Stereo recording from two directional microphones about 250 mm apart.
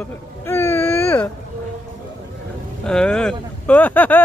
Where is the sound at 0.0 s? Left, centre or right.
Centre.